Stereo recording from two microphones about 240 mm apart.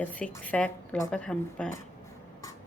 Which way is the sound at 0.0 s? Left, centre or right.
Centre.